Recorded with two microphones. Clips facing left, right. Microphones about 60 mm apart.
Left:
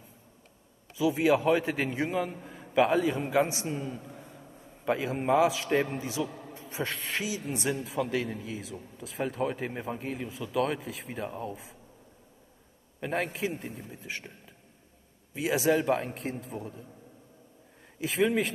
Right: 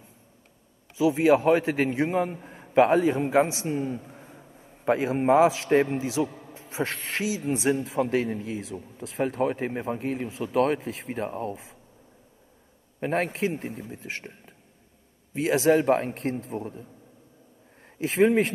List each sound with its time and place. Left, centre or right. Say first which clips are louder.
0.9 s a man's voice: right 4 dB; right
3.6 s speech: right 6 dB; right
3.9 s a sound: right 5 dB; right
4.8 s speech: right 6 dB; right
13.0 s speech: right 5 dB; right
15.3 s speech: right 5 dB; right
17.9 s speech: right 6 dB; right